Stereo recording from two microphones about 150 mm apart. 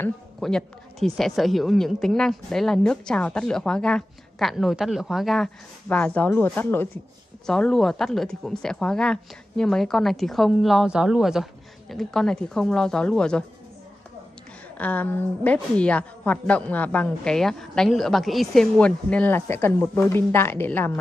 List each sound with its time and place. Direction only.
0.4 s a woman's voice: 5° left (ahead or behind)
14.8 s a woman's voice: 10° left (ahead or behind)